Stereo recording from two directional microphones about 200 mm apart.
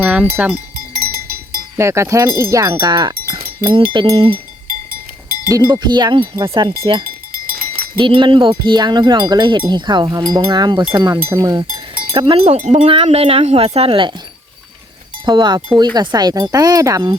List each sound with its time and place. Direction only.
0.0 s speech: 5° right (ahead or behind)
0.9 s cowbell: 45° right (ahead or behind)
1.7 s wind chime: 15° right (ahead or behind)
5.5 s wind chime: 20° right (ahead or behind)
7.9 s wind chime: 25° right (ahead or behind)
15.2 s wind chime: 20° right (ahead or behind)